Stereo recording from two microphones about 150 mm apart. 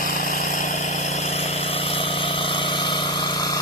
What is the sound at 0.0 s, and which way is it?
Vehicle, 60° left (ahead or behind).